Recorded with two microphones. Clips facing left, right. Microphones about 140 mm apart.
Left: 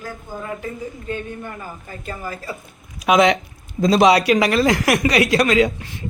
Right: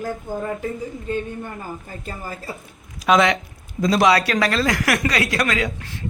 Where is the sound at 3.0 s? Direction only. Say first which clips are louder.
Left 2 dB; 20° left (ahead or behind).